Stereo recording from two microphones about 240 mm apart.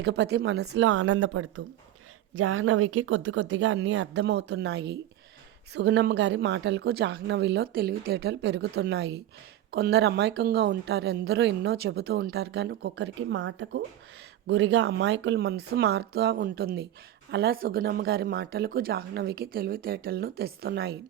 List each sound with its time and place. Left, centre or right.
0.0 s a woman's voice: right